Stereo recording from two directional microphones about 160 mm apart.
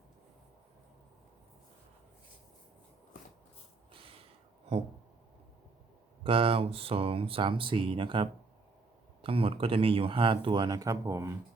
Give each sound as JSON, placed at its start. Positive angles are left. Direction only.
{"t": 3.9, "sound": "snort", "side_deg": -35}
{"t": 6.2, "sound": "speech", "side_deg": -35}